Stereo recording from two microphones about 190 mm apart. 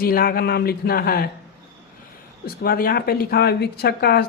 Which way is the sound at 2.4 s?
50° left (ahead or behind).